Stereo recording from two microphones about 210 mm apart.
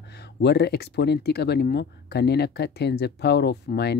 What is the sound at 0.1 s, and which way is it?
Speech, 50° left (ahead or behind).